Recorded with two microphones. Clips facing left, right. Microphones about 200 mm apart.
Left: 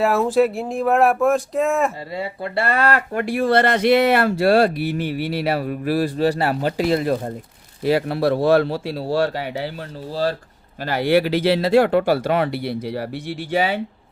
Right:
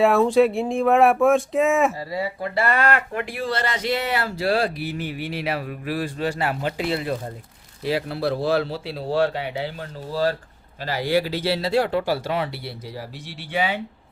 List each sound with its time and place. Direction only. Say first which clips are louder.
0.0 s speech: right 1 dB; centre (ahead or behind)
2.7 s speech: left 3 dB; 30° left (ahead or behind)
3.2 s speech: left 8 dB; 45° left (ahead or behind)
5.4 s speech: left 5 dB; 40° left (ahead or behind)
7.9 s speech: left 5 dB; 55° left (ahead or behind)
10.8 s speech: left 5 dB; 60° left (ahead or behind)
13.5 s speech: left 4 dB; 40° left (ahead or behind)